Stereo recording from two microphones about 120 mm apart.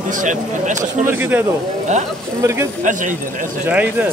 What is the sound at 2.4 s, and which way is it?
Speech, 25° right (ahead or behind).